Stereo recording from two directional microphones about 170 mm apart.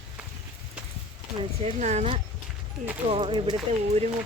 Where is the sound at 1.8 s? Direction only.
40° right (ahead or behind).